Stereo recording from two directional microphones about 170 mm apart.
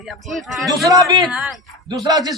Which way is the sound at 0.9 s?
25° right (ahead or behind).